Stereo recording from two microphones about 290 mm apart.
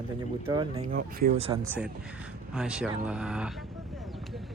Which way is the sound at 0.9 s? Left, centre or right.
Right.